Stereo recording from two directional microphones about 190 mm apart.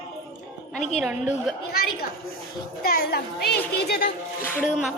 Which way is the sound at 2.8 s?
55° left (ahead or behind).